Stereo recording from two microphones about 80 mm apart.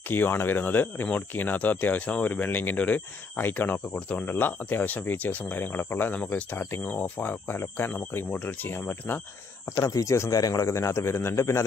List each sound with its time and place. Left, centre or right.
0.1 s speech: left
9.7 s speech: left